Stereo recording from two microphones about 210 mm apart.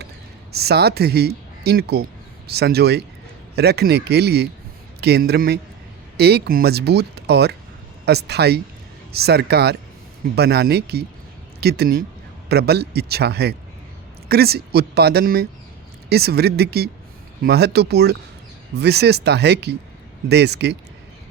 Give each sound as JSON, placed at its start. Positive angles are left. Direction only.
{"t": 0.5, "sound": "speech", "side_deg": -50}